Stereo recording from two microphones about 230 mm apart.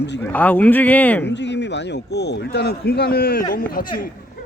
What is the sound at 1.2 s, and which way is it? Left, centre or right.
Speech, left.